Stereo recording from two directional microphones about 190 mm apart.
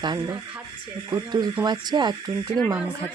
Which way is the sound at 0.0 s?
25° right (ahead or behind).